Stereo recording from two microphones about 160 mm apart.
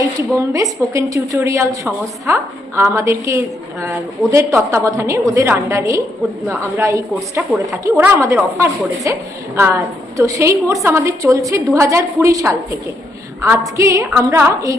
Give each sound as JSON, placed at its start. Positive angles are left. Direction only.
{"t": 0.3, "sound": "a woman's voice", "side_deg": -20}
{"t": 13.7, "sound": "a woman's voice", "side_deg": -20}